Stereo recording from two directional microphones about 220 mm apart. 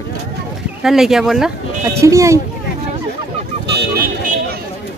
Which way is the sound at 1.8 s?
15° right (ahead or behind).